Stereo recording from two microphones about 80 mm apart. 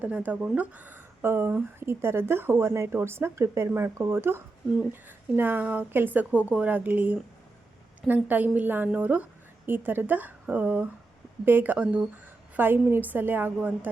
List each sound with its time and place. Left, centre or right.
0.0 s speech: centre